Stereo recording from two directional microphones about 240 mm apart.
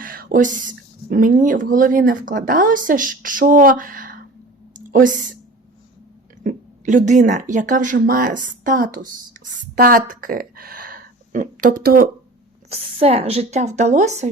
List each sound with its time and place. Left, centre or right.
0.0 s speech: right
4.7 s a sound: right
6.4 s speech: right
12.7 s speech: right